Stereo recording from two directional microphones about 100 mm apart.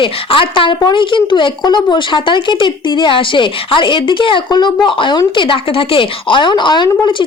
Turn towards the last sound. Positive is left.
turn(degrees=55)  # may be behind; listen again after turning